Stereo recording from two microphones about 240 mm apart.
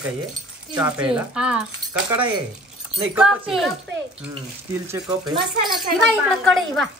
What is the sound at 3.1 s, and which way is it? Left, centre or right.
Speech, centre.